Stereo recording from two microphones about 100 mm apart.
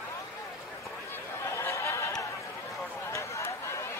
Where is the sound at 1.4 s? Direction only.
30° left (ahead or behind).